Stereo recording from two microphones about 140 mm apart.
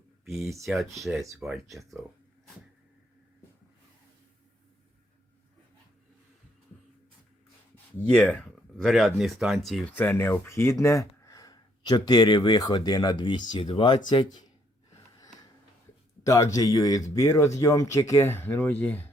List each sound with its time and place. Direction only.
0.3 s speech: centre (ahead or behind)
8.0 s speech: 10° left (ahead or behind)
9.9 s speech: 15° left (ahead or behind); by 14.3 s 35° left (ahead or behind)
16.2 s speech: 25° left (ahead or behind)